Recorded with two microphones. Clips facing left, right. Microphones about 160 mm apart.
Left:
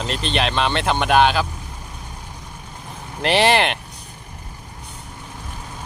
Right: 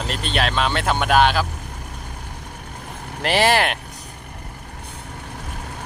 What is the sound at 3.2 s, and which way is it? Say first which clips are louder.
Speech: left 1 dB; centre (ahead or behind).